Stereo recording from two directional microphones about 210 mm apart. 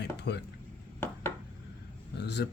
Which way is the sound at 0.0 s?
50° left (ahead or behind).